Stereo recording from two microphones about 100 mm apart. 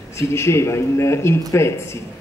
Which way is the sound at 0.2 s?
25° left (ahead or behind).